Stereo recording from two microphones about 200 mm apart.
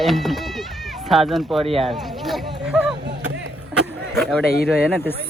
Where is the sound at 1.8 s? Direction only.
Centre (ahead or behind).